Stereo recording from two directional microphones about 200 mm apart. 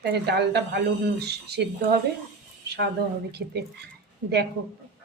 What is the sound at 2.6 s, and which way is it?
Speech, 55° right (ahead or behind).